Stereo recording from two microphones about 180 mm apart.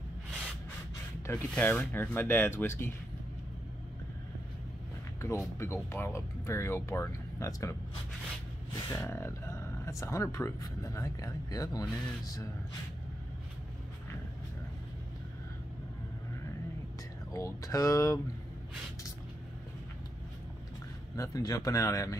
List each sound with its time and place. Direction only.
1.2 s speech: 10° left (ahead or behind)
5.2 s speech: 15° left (ahead or behind)
8.7 s speech: 15° left (ahead or behind)
17.3 s speech: 20° left (ahead or behind)
21.2 s speech: 20° left (ahead or behind)